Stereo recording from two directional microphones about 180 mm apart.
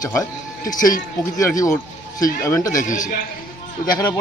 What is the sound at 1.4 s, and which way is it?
A man's voice, 15° left (ahead or behind).